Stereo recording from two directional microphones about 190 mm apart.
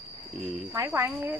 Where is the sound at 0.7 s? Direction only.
15° right (ahead or behind).